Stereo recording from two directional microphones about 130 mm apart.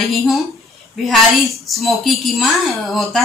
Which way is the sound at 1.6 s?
Centre (ahead or behind).